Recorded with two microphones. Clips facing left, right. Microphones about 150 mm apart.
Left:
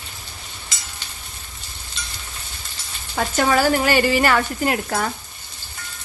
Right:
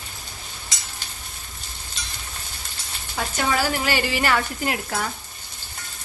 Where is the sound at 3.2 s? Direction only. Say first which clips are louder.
Left 5 dB; 55° left (ahead or behind).